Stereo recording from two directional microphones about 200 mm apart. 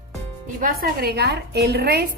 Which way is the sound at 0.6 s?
50° right (ahead or behind).